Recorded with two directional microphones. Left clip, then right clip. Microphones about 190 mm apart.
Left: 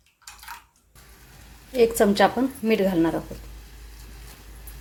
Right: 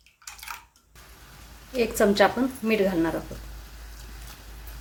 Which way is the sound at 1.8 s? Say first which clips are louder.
Left 2 dB; 15° left (ahead or behind).